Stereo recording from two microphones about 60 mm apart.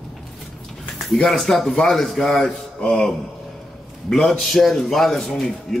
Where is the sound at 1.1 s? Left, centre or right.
Centre.